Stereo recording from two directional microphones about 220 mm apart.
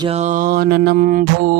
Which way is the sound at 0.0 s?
30° right (ahead or behind).